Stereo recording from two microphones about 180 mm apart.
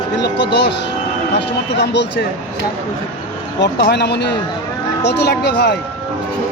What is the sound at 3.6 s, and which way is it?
Speech, 70° left (ahead or behind).